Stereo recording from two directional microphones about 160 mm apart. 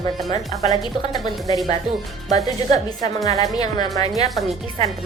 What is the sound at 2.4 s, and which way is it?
A woman's voice, 25° left (ahead or behind).